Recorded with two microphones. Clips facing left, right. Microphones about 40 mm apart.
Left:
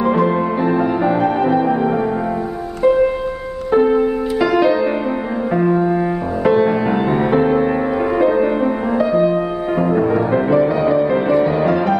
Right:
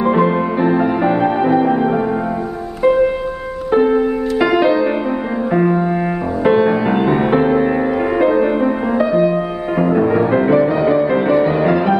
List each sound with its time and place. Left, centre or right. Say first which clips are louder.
0.0 s music: right 1 dB; centre
3.7 s music: even; centre